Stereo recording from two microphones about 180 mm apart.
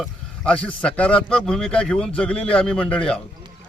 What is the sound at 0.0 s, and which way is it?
A man's voice, 5° left (ahead or behind).